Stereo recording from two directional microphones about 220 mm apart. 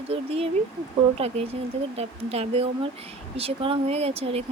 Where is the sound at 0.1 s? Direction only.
25° right (ahead or behind).